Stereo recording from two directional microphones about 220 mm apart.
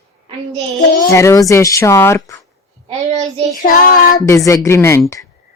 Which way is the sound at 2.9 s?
30° right (ahead or behind).